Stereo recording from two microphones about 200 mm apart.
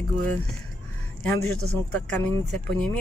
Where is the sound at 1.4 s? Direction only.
55° right (ahead or behind).